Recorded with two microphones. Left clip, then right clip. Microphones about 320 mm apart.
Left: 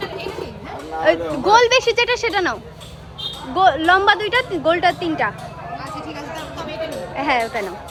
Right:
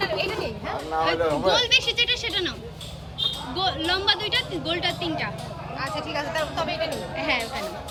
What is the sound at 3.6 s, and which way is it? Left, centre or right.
A woman's voice, centre.